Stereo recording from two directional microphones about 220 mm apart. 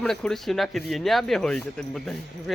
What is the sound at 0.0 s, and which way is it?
Speech, centre (ahead or behind).